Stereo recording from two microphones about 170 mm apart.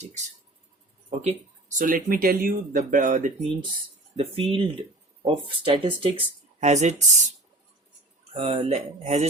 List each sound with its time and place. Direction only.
1.2 s speech: 45° right (ahead or behind)
4.2 s speech: 35° right (ahead or behind)
8.3 s speech: 35° right (ahead or behind)